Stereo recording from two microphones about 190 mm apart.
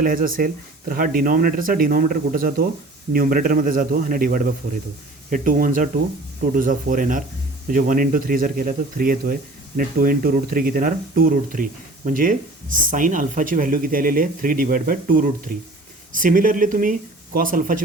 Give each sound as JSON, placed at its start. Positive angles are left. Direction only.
{"t": 0.0, "sound": "speech", "side_deg": -45}